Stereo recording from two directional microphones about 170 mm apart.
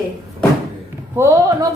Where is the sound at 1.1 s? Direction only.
15° right (ahead or behind).